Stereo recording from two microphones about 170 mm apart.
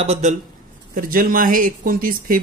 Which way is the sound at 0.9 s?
55° right (ahead or behind).